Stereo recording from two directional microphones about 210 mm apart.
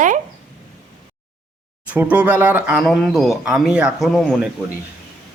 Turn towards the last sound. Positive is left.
turn(degrees=0)  # may be behind; listen again after turning